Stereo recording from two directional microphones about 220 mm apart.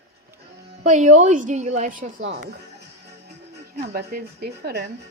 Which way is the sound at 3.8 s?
45° right (ahead or behind).